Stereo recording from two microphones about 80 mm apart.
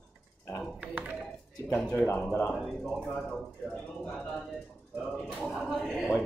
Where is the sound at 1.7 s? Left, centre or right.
Centre.